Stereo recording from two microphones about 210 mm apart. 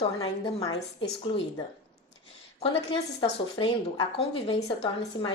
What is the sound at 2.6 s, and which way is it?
A woman's voice, 25° left (ahead or behind).